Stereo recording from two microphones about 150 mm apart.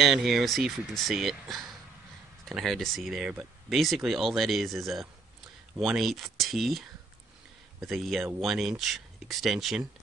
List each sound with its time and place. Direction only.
0.0 s speech: centre (ahead or behind)